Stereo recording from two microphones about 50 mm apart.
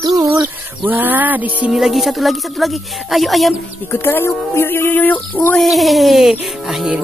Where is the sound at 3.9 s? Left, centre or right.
Left.